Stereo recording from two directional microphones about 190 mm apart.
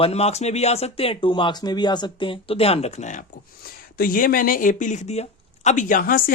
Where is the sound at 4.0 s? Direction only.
50° left (ahead or behind).